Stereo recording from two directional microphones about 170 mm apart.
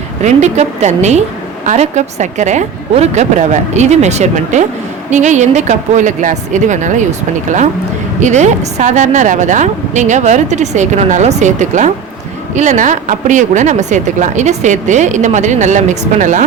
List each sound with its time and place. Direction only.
0.2 s a woman's voice: 45° right (ahead or behind)